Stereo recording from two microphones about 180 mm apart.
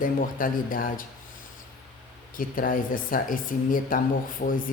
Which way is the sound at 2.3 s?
50° left (ahead or behind).